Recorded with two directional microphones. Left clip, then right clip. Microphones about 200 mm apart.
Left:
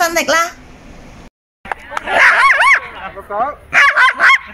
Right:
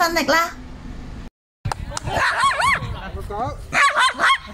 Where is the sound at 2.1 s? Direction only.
20° right (ahead or behind).